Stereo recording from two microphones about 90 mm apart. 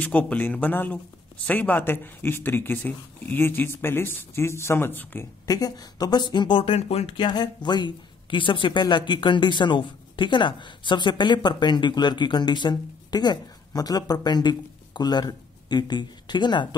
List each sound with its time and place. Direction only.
0.0 s speech: 15° left (ahead or behind)
5.5 s speech: 45° left (ahead or behind)